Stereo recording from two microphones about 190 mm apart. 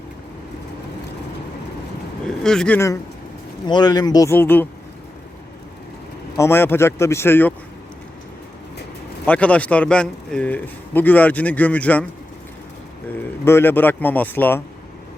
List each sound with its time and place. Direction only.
2.4 s speech: 5° left (ahead or behind)
6.3 s speech: 15° left (ahead or behind)
9.2 s speech: 5° left (ahead or behind)
13.4 s speech: 10° left (ahead or behind)